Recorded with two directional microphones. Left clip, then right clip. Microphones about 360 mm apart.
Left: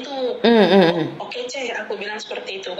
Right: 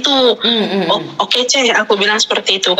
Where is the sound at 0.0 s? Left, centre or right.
Right.